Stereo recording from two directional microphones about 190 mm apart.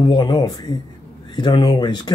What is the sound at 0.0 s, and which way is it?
Speech, 25° left (ahead or behind).